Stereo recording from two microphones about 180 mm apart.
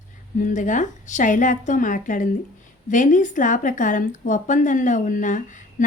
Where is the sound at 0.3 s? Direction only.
45° left (ahead or behind).